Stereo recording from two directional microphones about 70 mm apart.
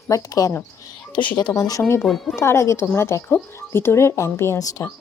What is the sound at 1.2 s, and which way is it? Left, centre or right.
Speech, left.